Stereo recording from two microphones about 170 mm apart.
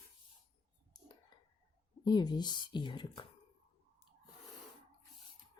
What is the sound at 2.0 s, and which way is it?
Speech, 25° left (ahead or behind).